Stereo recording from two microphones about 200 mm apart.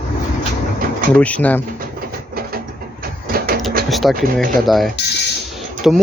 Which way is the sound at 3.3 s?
50° right (ahead or behind).